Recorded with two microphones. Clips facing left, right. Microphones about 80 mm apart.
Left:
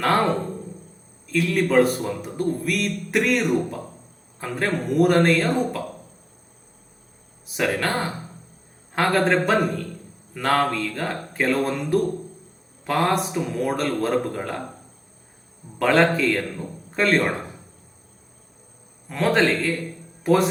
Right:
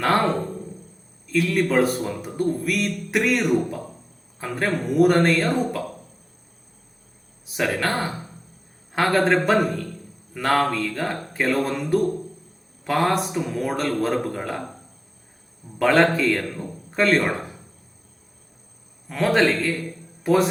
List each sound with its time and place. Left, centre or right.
0.0 s a man's voice: centre
1.5 s a man's voice: centre
7.4 s a man's voice: centre
15.8 s a man's voice: centre
19.0 s a man's voice: centre